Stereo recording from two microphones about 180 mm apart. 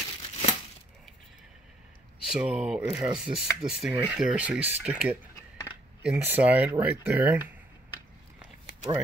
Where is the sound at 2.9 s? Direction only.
20° right (ahead or behind).